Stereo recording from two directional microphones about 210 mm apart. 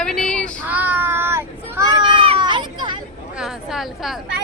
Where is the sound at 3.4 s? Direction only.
Centre (ahead or behind).